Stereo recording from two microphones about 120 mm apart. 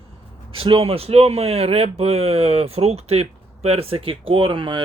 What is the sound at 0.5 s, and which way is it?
Speech, 50° right (ahead or behind).